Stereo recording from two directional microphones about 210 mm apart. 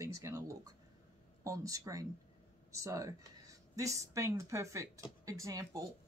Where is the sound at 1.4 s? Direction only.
15° right (ahead or behind).